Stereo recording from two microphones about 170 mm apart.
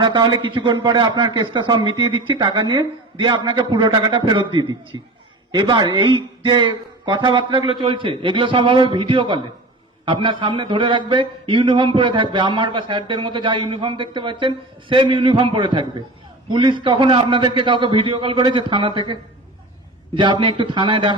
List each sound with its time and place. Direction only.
0.0 s a man's voice: 25° right (ahead or behind)